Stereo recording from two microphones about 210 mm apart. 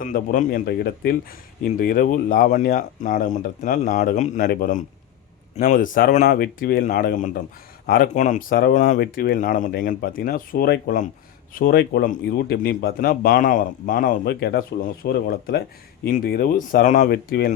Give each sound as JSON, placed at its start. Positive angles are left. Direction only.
{"t": 0.0, "sound": "speech", "side_deg": 40}